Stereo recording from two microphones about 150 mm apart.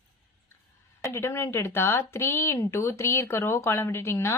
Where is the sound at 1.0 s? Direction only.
15° left (ahead or behind).